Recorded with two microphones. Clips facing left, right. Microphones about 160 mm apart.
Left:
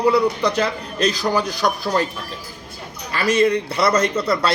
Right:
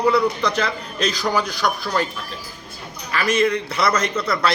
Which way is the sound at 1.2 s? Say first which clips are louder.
Left 2 dB; 30° left (ahead or behind).